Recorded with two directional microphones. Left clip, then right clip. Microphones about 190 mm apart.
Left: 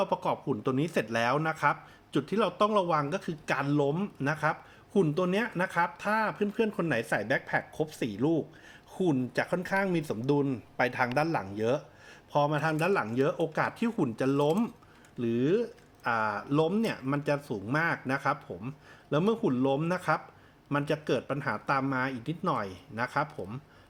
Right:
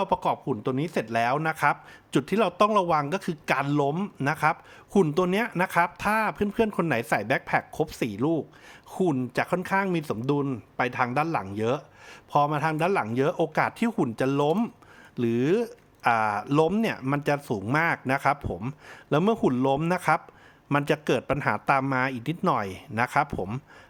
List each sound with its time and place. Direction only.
0.0 s speech: 25° right (ahead or behind)